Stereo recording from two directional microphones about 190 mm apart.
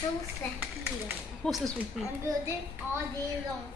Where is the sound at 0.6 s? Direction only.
5° right (ahead or behind).